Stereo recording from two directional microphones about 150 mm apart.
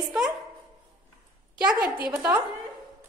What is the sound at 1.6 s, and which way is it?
Speech, 5° right (ahead or behind).